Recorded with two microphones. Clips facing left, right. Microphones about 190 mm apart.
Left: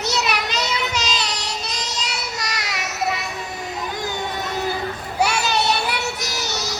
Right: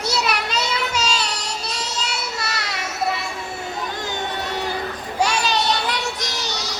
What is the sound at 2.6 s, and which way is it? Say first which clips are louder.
Child singing: even; 10° left (ahead or behind).